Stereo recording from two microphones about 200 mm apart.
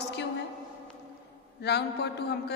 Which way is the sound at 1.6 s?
55° left (ahead or behind).